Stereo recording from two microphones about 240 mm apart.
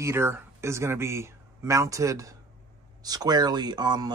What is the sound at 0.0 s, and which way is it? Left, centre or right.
Speech, centre.